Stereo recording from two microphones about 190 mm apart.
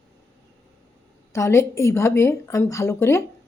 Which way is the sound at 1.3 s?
15° left (ahead or behind).